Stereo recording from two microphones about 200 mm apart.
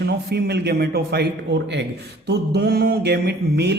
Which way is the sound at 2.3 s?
55° right (ahead or behind).